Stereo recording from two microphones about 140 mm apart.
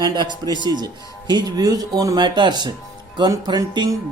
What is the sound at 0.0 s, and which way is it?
Music, 30° right (ahead or behind).